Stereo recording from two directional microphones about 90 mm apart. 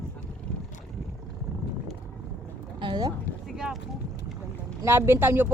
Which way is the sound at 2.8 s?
70° right (ahead or behind).